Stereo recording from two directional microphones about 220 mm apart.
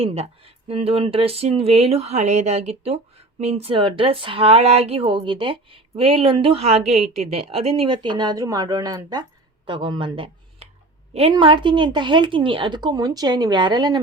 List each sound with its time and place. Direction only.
0.0 s speech: 25° right (ahead or behind)